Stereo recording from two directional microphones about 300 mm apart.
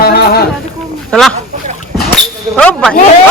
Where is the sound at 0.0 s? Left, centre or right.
Left.